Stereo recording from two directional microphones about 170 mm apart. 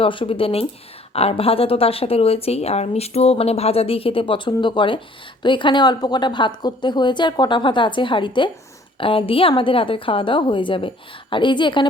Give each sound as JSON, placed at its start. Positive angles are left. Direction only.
{"t": 0.0, "sound": "a woman's voice", "side_deg": 30}